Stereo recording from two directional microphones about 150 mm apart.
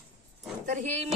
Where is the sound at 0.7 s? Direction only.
50° right (ahead or behind).